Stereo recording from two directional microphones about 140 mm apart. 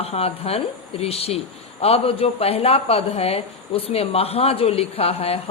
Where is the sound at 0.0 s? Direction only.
45° left (ahead or behind).